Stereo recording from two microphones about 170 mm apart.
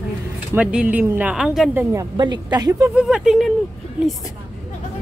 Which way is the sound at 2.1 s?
25° right (ahead or behind).